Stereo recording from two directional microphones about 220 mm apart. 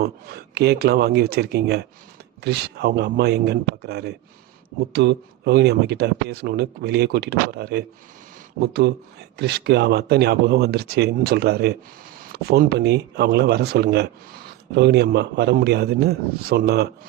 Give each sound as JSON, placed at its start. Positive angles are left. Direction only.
{"t": 0.0, "sound": "speech", "side_deg": -45}